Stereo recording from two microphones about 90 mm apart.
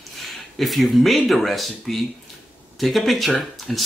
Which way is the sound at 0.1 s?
Centre (ahead or behind).